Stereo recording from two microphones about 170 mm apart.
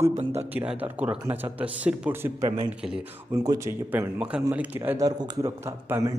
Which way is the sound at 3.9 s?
10° right (ahead or behind).